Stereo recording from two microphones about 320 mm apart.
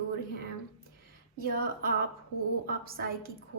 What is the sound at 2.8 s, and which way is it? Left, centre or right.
Speech, right.